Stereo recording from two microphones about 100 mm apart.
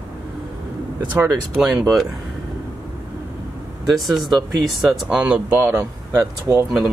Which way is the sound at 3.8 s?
Centre (ahead or behind).